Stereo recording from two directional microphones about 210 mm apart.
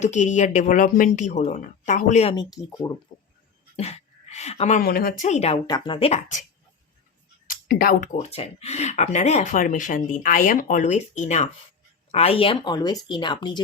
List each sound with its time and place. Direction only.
0.0 s speech: 35° left (ahead or behind)
2.3 s speech: 20° left (ahead or behind)
3.8 s speech: 30° left (ahead or behind)
5.6 s speech: 20° left (ahead or behind)
7.4 s speech: 45° left (ahead or behind); by 13.6 s 20° left (ahead or behind)